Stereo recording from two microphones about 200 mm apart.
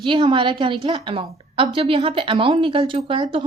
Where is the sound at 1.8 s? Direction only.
25° right (ahead or behind).